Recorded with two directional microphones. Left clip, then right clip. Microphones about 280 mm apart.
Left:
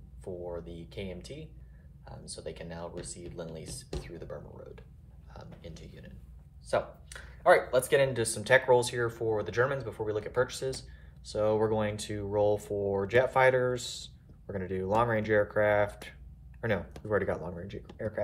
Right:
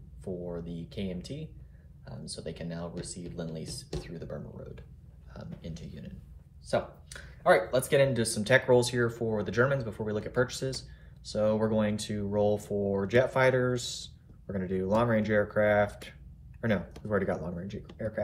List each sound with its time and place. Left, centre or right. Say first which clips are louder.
0.2 s speech: right 1 dB; left